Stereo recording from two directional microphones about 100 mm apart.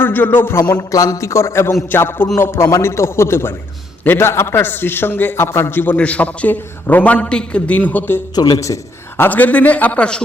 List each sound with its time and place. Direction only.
0.0 s a man's voice: 20° left (ahead or behind)
0.7 s a man's voice: 35° left (ahead or behind); by 8.2 s 20° left (ahead or behind)
8.4 s a man's voice: 40° left (ahead or behind); by 10.2 s 10° left (ahead or behind)